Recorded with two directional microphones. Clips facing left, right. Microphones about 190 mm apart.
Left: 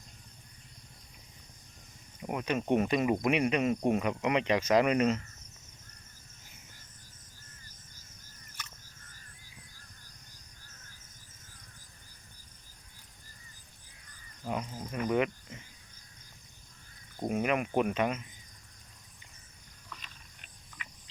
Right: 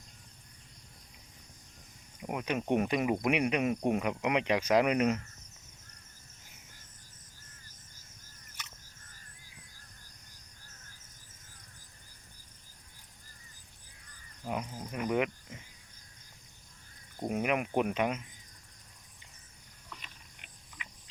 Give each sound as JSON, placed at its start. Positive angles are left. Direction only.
{"t": 2.2, "sound": "speech", "side_deg": -10}
{"t": 14.4, "sound": "cricket", "side_deg": -15}
{"t": 17.2, "sound": "cricket", "side_deg": -15}
{"t": 19.9, "sound": "a sound", "side_deg": -15}